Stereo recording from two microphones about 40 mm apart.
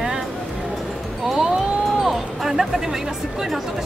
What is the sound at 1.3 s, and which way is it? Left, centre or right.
Speech, centre.